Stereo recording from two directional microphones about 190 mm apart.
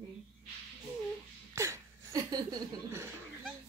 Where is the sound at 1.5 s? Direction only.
15° right (ahead or behind).